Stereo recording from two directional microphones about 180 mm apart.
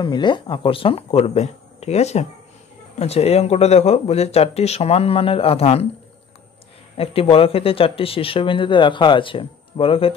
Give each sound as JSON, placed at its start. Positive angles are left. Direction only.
{"t": 0.0, "sound": "speech", "side_deg": 25}
{"t": 7.0, "sound": "speech", "side_deg": 30}